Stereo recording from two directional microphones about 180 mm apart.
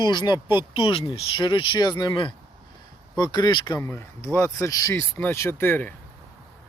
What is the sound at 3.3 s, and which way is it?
Speech, 25° left (ahead or behind).